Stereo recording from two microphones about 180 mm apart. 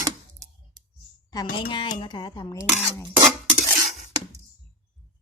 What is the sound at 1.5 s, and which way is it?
Speech, 25° left (ahead or behind).